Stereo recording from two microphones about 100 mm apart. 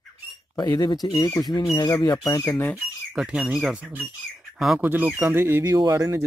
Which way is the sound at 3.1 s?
5° right (ahead or behind).